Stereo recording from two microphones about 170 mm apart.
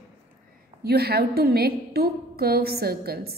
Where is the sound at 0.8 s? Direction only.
65° right (ahead or behind).